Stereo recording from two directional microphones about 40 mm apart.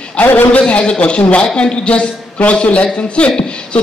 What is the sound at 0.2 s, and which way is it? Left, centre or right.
Speech, left.